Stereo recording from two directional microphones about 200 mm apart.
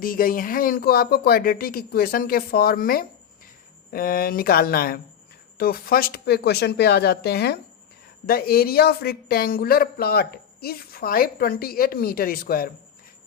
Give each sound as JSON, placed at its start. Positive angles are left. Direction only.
{"t": 0.0, "sound": "speech", "side_deg": 45}